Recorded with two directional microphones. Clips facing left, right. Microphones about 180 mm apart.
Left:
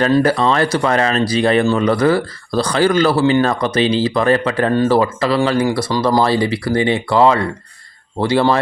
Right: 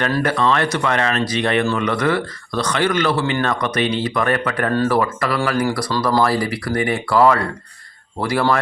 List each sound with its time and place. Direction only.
0.0 s speech: 30° left (ahead or behind)